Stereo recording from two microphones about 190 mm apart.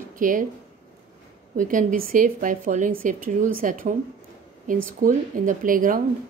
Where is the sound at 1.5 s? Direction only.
45° right (ahead or behind).